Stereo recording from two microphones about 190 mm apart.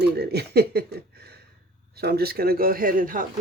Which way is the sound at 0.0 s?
60° right (ahead or behind).